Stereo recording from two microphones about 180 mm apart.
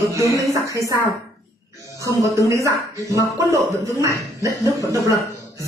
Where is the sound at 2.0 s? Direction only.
20° right (ahead or behind).